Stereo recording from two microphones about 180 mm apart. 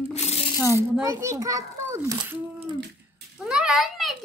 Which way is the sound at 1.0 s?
15° right (ahead or behind).